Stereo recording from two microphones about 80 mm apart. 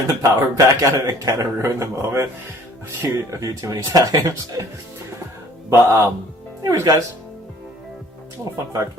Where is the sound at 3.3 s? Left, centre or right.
Right.